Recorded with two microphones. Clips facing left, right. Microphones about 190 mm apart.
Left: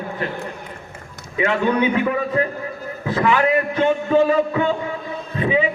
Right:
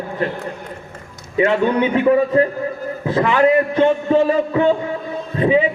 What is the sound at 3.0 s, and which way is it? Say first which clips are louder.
A man's voice: right 3 dB; 35° right (ahead or behind).